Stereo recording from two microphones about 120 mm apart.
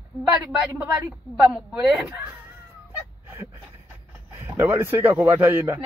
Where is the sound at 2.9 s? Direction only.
20° right (ahead or behind).